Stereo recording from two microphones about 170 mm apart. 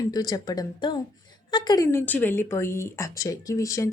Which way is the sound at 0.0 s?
25° left (ahead or behind).